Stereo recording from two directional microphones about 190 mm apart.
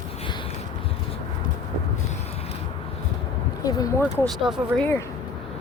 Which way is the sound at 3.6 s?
20° left (ahead or behind).